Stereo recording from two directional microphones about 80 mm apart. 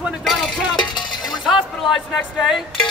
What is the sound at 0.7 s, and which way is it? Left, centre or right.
Cowbell, left.